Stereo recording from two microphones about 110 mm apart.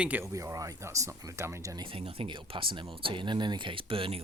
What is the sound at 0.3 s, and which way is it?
Speech, 30° right (ahead or behind).